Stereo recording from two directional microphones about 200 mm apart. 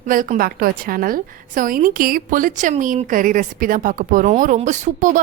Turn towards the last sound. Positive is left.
turn(degrees=-40)  # may be behind; listen again after turning